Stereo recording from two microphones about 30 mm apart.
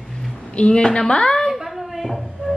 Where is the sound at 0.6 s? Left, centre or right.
Left.